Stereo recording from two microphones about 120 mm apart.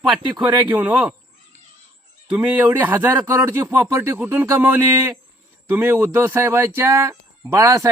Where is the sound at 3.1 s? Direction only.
30° right (ahead or behind).